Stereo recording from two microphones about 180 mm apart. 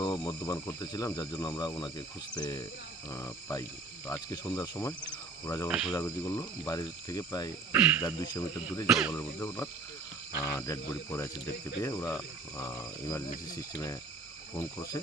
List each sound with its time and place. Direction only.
0.0 s speech: 25° left (ahead or behind)
5.6 s cricket: 5° right (ahead or behind)
5.9 s speech: 20° left (ahead or behind)
7.7 s speech: 10° right (ahead or behind)
8.0 s speech: 20° left (ahead or behind)
8.9 s cricket: 5° right (ahead or behind)
9.1 s speech: 15° left (ahead or behind)